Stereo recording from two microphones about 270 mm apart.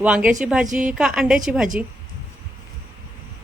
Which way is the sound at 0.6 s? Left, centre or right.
Right.